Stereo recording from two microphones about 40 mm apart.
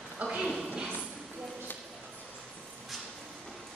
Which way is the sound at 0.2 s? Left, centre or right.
Right.